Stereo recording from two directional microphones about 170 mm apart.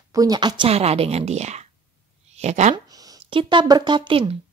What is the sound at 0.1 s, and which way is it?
Speech, 20° right (ahead or behind).